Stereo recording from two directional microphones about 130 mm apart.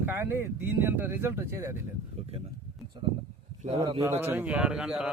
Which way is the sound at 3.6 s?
65° right (ahead or behind).